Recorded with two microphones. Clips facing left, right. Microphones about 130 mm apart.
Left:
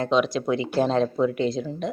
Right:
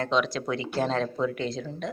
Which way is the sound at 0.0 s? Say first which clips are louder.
Left 4 dB; 15° left (ahead or behind).